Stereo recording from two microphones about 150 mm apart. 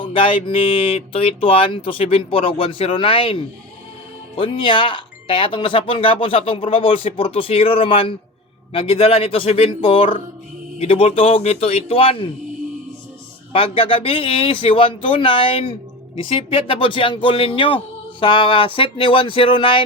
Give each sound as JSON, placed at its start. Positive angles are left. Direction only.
{"t": 0.0, "sound": "speech", "side_deg": 35}
{"t": 13.5, "sound": "speech", "side_deg": 35}